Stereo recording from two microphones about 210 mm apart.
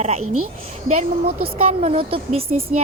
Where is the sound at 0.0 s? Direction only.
30° right (ahead or behind).